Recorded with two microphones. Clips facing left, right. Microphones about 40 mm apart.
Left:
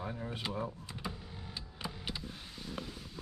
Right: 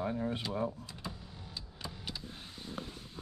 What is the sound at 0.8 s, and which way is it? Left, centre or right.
Power windows, left.